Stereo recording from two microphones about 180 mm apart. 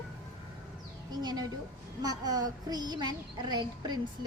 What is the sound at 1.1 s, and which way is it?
A woman's voice, 20° right (ahead or behind).